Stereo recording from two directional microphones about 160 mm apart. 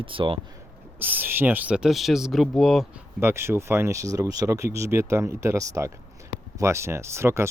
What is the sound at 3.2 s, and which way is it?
Speech, 15° right (ahead or behind).